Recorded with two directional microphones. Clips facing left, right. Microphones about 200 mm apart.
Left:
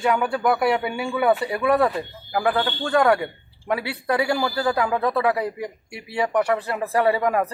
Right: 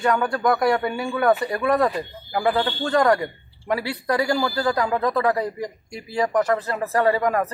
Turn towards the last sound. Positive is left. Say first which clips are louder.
# even
turn(degrees=10)  # may be behind; listen again after turning